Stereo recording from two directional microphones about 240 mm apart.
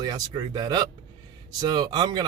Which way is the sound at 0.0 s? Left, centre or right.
Centre.